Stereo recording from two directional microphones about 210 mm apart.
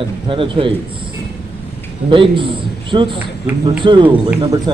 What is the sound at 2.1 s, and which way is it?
A man's voice, 25° right (ahead or behind).